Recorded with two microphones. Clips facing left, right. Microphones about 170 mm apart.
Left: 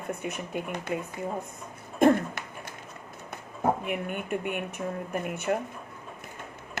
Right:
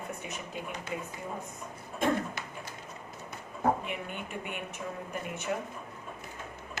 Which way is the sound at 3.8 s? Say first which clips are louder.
Left 7 dB; 55° left (ahead or behind).